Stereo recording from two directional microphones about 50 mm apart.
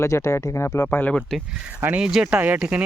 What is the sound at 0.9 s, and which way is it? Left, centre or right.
Speech, left.